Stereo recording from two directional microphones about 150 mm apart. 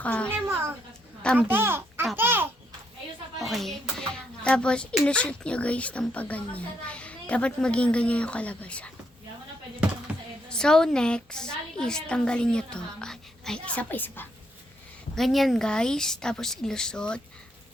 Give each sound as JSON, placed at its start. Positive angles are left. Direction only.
{"t": 0.0, "sound": "a child's voice", "side_deg": 10}
{"t": 0.4, "sound": "a child's voice", "side_deg": -15}
{"t": 3.4, "sound": "a child's voice", "side_deg": 0}
{"t": 10.5, "sound": "a woman's voice", "side_deg": 5}
{"t": 15.1, "sound": "a woman's voice", "side_deg": 0}